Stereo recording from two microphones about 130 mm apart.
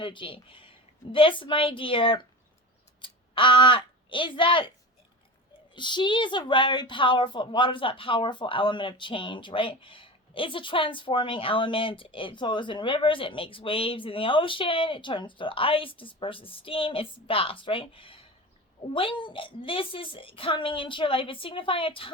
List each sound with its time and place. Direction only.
0.0 s a woman's voice: 40° left (ahead or behind)
5.7 s a woman's voice: 35° left (ahead or behind)